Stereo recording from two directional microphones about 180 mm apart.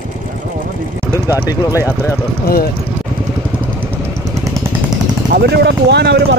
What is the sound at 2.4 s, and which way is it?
Speech, 60° left (ahead or behind).